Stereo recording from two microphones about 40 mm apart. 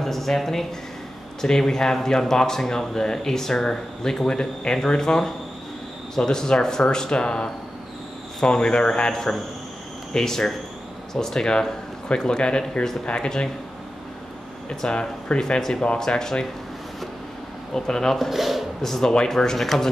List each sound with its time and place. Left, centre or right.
0.0 s speech: centre; by 9.1 s left
9.1 s speech: centre
14.8 s speech: left
17.7 s speech: centre
18.1 s speech: centre
18.8 s speech: centre